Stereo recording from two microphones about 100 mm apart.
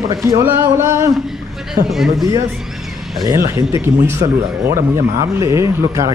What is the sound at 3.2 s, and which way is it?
Speech, 35° right (ahead or behind).